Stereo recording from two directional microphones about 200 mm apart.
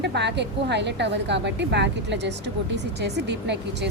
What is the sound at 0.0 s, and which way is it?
A woman's voice, 60° right (ahead or behind).